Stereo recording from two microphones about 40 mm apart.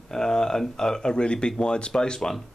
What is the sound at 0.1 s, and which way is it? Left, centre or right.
Speech, centre.